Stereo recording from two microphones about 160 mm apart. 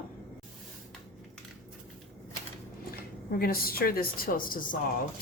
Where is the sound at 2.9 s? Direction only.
70° left (ahead or behind).